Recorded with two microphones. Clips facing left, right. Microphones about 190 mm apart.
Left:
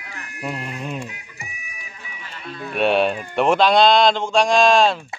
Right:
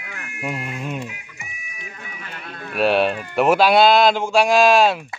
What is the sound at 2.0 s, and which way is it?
Sheep, 55° right (ahead or behind).